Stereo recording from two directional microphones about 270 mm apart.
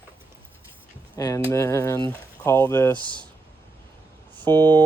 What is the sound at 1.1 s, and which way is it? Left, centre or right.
Speech, centre.